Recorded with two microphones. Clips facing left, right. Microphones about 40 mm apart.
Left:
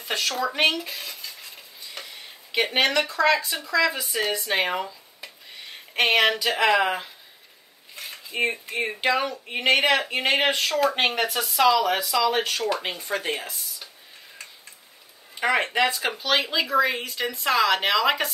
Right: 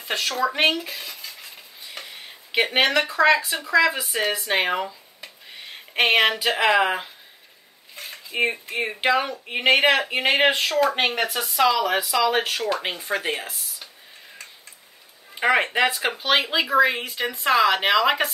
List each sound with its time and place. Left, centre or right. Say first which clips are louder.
0.0 s speech: right 2 dB; centre
0.8 s cutlery: right 1 dB; centre
2.0 s a sound: right 1 dB; centre
2.5 s speech: right 2 dB; centre
15.4 s speech: right 2 dB; centre